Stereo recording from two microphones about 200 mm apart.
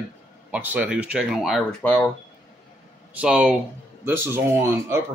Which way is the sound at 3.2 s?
5° right (ahead or behind).